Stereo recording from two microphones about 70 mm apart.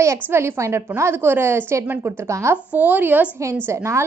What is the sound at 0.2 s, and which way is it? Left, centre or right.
A woman's voice, right.